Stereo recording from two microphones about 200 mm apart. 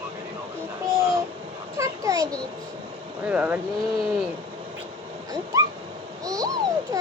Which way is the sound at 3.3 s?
10° right (ahead or behind).